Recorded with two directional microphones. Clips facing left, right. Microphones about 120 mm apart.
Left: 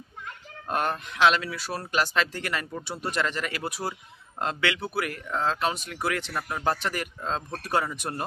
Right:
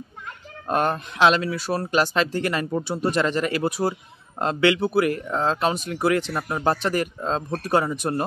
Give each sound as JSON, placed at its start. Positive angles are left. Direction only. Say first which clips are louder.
{"t": 0.7, "sound": "speech", "louder": "right 5 dB", "side_deg": -35}